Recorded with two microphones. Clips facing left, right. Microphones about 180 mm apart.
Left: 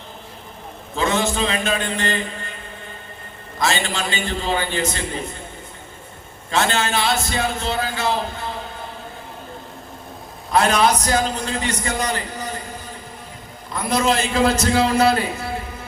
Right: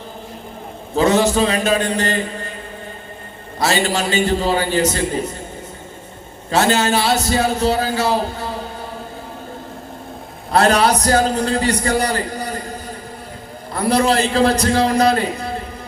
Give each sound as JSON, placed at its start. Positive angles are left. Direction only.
{"t": 0.9, "sound": "a man's voice", "side_deg": -40}
{"t": 3.6, "sound": "a man's voice", "side_deg": -40}
{"t": 6.5, "sound": "a man's voice", "side_deg": -40}
{"t": 10.5, "sound": "a man's voice", "side_deg": -35}
{"t": 13.7, "sound": "a man's voice", "side_deg": -35}